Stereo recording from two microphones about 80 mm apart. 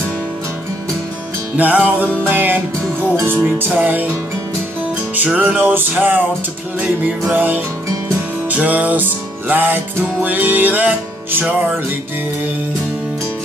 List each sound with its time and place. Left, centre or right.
1.6 s music: centre
5.1 s music: centre